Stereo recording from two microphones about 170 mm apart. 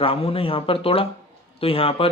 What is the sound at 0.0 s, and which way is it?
Speech, 35° left (ahead or behind).